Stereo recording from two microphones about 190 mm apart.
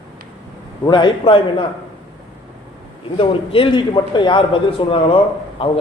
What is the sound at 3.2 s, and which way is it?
A man's voice, 30° left (ahead or behind).